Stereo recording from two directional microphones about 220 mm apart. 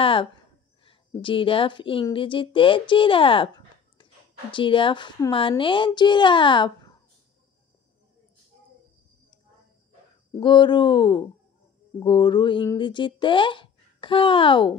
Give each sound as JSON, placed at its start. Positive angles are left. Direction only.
{"t": 0.0, "sound": "a sound", "side_deg": 25}
{"t": 0.8, "sound": "speech", "side_deg": 25}
{"t": 10.4, "sound": "speech", "side_deg": 20}